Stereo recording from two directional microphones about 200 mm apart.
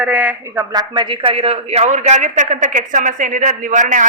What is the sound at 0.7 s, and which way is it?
A man's voice, 20° right (ahead or behind).